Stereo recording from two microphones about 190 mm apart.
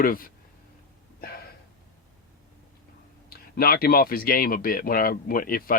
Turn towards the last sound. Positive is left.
turn(degrees=50)  # may be behind; listen again after turning